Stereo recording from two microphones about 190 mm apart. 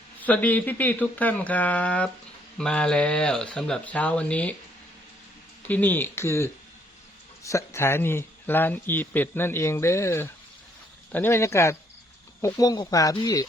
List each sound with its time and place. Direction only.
0.2 s speech: 10° left (ahead or behind)
5.6 s speech: 10° left (ahead or behind)